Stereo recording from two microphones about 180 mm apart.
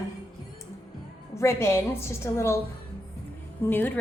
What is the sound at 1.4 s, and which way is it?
A woman's voice, 15° left (ahead or behind).